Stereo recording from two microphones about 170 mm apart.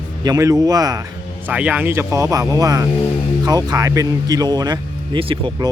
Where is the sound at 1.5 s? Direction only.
10° right (ahead or behind).